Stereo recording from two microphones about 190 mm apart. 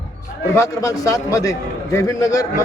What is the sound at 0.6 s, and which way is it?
A man's voice, 15° left (ahead or behind).